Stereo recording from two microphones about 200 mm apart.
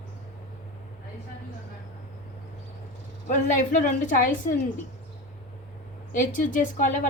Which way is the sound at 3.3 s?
40° left (ahead or behind).